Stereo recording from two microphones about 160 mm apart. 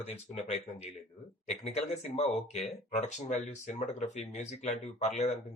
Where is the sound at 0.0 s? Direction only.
45° left (ahead or behind).